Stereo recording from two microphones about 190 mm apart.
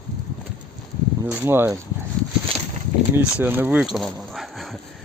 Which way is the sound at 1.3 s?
10° right (ahead or behind).